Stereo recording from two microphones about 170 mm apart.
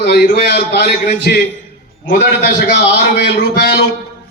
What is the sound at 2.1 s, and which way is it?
Speech, 85° left.